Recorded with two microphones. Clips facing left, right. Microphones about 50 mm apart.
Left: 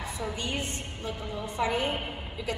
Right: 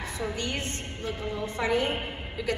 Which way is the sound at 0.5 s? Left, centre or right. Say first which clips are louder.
Even; right.